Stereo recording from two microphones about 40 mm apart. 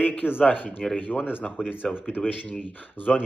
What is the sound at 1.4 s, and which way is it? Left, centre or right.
Speech, centre.